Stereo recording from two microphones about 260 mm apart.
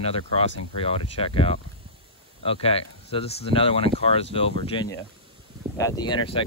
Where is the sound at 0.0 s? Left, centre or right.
Left.